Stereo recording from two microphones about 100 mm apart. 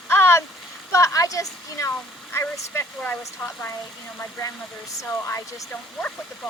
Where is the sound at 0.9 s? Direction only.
30° left (ahead or behind); by 6.5 s 15° left (ahead or behind).